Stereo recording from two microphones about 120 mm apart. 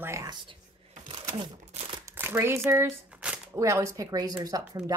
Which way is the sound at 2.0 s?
20° right (ahead or behind).